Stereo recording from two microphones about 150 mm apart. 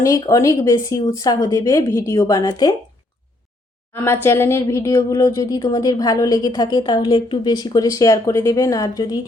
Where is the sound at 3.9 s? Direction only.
15° left (ahead or behind).